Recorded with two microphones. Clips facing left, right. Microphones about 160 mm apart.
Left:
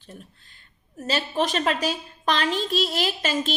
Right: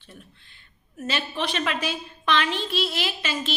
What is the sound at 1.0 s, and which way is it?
A woman's voice, 40° left (ahead or behind).